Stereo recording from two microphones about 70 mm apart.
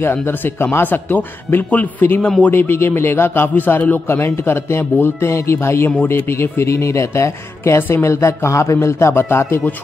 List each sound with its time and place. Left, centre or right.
0.0 s speech: left